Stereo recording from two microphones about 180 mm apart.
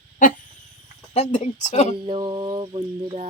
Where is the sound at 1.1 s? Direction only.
40° left (ahead or behind).